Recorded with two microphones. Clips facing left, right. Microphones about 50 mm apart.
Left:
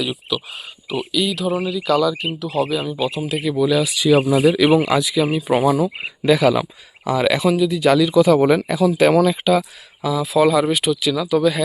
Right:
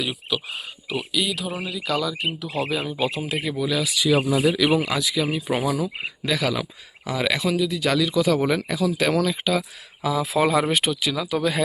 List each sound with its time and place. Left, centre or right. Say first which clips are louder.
0.0 s speech: left 3 dB; centre
2.5 s speech: left 7 dB; right
3.2 s speech: left 5 dB; right
4.0 s speech: left 5 dB; left
4.5 s speech: left 6 dB; left
4.9 s speech: left 6 dB; centre
9.3 s speech: left 7 dB; centre
10.0 s speech: left 5 dB; right
10.7 s speech: left 4 dB; right
11.0 s speech: left 6 dB; right